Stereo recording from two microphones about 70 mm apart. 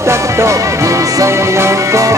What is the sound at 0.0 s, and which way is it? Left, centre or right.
Music, right.